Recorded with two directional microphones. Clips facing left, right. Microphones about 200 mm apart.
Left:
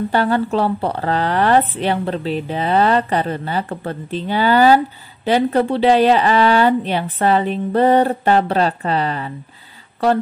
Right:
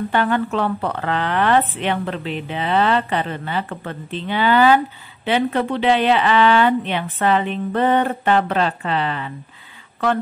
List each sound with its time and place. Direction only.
0.1 s speech: 35° left (ahead or behind)